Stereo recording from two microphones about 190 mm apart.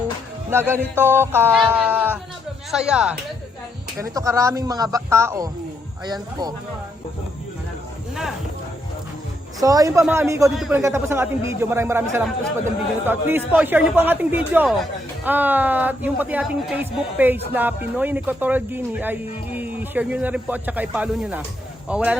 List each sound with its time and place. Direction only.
0.5 s a man's voice: 10° right (ahead or behind)
1.5 s a sound: 10° right (ahead or behind)
2.7 s speech: 5° right (ahead or behind)
3.9 s a man's voice: 15° right (ahead or behind)
9.6 s a man's voice: 20° right (ahead or behind)
10.5 s speech: centre (ahead or behind)
10.8 s a man's voice: 15° right (ahead or behind)